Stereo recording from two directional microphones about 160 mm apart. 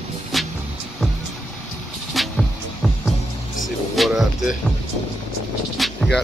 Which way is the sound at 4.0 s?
Centre (ahead or behind).